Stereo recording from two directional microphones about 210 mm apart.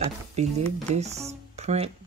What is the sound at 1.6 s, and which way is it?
Music, 30° right (ahead or behind).